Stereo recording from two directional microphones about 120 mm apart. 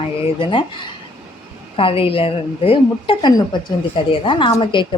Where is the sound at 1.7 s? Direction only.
50° left (ahead or behind).